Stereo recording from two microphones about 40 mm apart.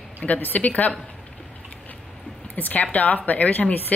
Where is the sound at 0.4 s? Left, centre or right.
Left.